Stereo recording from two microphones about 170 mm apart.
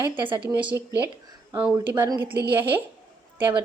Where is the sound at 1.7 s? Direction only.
15° right (ahead or behind).